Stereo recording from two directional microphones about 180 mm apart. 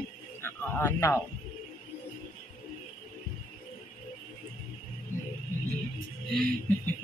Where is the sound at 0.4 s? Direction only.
15° left (ahead or behind).